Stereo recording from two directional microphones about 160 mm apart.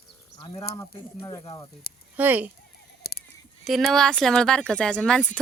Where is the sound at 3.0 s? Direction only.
80° left.